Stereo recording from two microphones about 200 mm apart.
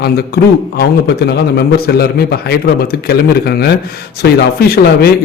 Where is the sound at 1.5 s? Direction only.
55° left (ahead or behind).